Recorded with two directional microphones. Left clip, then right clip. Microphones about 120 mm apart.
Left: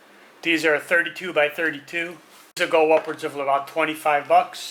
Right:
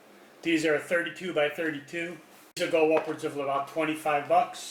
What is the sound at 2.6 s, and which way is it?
Speech, 10° right (ahead or behind).